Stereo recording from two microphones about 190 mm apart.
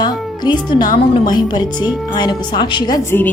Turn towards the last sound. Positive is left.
turn(degrees=15)  # may be behind; listen again after turning